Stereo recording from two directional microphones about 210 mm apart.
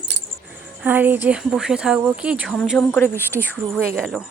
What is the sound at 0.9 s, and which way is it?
Speech, 10° right (ahead or behind).